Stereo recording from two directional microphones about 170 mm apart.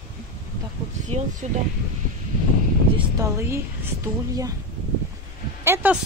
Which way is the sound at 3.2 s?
15° right (ahead or behind).